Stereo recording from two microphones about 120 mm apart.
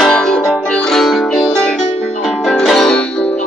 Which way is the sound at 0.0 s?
5° left (ahead or behind).